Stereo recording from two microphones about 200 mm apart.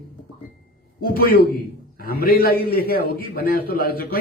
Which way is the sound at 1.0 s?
45° left (ahead or behind).